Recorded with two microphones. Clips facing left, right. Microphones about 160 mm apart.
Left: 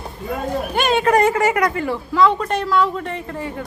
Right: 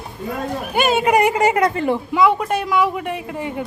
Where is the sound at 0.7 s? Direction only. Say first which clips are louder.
Right 1 dB; 5° right (ahead or behind).